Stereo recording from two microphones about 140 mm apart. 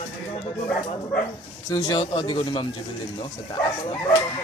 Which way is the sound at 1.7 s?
30° left (ahead or behind).